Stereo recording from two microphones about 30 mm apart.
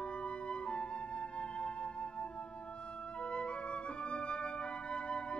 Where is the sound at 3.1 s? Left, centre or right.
Left.